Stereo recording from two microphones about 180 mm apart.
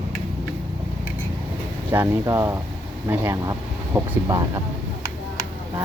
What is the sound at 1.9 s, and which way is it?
Speech, 15° right (ahead or behind).